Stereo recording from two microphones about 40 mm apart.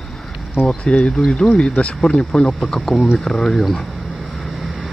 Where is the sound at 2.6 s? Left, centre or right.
Centre.